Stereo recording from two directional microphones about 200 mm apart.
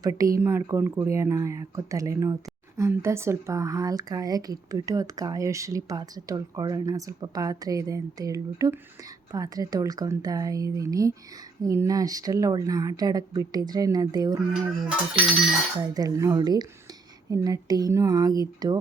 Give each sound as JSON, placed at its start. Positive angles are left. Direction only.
{"t": 0.0, "sound": "speech", "side_deg": -15}
{"t": 15.8, "sound": "a woman's voice", "side_deg": -20}